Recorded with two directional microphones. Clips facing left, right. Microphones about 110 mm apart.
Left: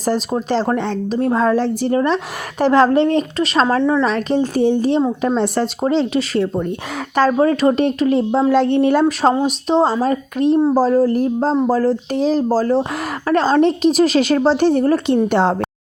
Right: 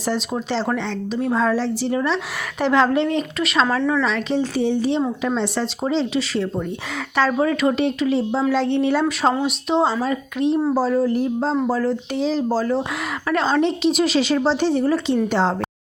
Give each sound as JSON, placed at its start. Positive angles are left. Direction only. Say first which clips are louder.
{"t": 0.0, "sound": "a woman's voice", "louder": "left 4 dB", "side_deg": 40}
{"t": 7.2, "sound": "a woman's voice", "louder": "left 5 dB", "side_deg": 40}
{"t": 9.3, "sound": "a woman's voice", "louder": "left 4 dB", "side_deg": 35}